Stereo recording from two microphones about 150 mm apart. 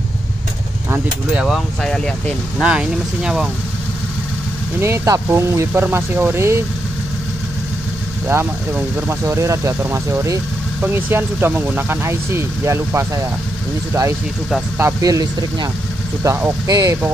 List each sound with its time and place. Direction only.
0.8 s speech: 5° right (ahead or behind)
2.6 s speech: 5° right (ahead or behind)
4.7 s speech: 15° right (ahead or behind)
8.3 s speech: 15° right (ahead or behind)
14.8 s speech: 20° right (ahead or behind)